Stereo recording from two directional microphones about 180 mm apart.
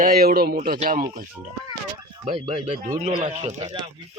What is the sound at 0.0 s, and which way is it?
A man's voice, 55° right (ahead or behind).